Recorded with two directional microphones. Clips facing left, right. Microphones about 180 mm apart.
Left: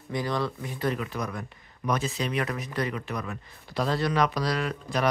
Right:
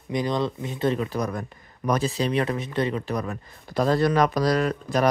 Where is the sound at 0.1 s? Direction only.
20° right (ahead or behind).